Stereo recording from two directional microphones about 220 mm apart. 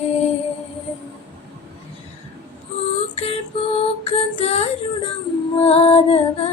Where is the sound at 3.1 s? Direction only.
25° left (ahead or behind).